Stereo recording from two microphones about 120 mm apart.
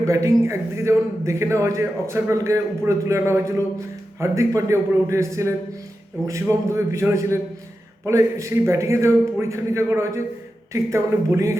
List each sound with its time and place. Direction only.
0.0 s a man's voice: 25° right (ahead or behind)